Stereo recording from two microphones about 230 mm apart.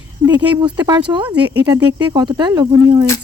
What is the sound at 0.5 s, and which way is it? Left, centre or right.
Speech, centre.